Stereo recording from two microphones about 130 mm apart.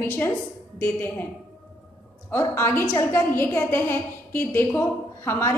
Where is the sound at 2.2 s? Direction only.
20° left (ahead or behind).